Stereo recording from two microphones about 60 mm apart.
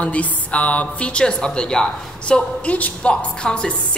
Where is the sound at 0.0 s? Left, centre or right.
Left.